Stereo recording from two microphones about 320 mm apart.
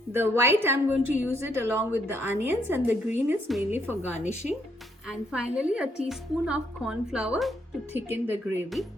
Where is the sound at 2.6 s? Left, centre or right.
Centre.